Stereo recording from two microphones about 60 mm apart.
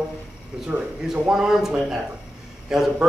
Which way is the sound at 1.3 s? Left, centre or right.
Centre.